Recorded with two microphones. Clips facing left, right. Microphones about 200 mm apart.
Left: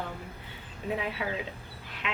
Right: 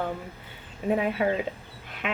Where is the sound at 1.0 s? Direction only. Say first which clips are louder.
Right 8 dB; 50° right (ahead or behind).